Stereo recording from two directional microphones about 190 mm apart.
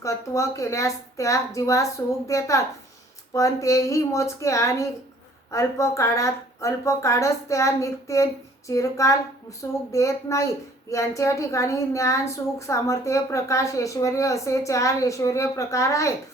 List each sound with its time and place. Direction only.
0.0 s a woman's voice: 15° left (ahead or behind)